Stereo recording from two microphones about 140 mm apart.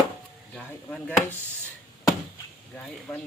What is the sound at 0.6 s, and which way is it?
Chop, 10° left (ahead or behind).